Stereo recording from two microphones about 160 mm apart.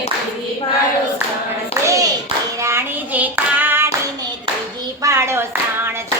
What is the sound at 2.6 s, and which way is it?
Child singing, 15° right (ahead or behind).